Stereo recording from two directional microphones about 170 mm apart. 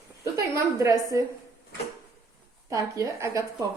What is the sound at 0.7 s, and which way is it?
Speech, 20° right (ahead or behind).